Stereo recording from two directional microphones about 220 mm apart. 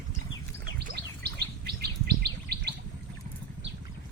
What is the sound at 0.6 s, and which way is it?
Bird, 50° right (ahead or behind).